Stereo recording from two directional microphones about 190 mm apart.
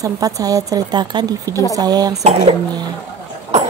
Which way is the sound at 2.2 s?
35° right (ahead or behind).